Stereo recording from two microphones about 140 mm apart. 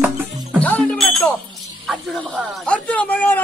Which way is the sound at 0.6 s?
10° left (ahead or behind).